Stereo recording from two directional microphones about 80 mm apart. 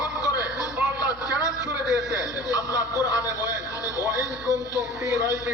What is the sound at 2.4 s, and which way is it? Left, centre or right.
Speech, left.